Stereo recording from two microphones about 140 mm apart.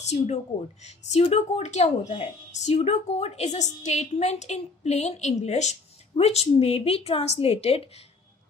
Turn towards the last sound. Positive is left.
turn(degrees=45)  # may be behind; listen again after turning